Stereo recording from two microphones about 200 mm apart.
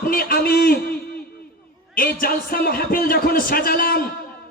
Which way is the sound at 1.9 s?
45° left (ahead or behind).